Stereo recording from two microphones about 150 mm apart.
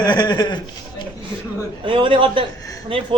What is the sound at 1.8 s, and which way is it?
A woman's voice, 35° right (ahead or behind).